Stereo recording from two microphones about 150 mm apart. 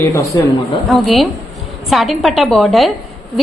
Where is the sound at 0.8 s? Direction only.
Centre (ahead or behind).